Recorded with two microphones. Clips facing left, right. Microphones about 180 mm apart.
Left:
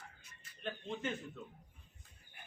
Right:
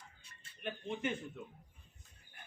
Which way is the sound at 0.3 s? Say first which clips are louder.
Even; 30° right (ahead or behind).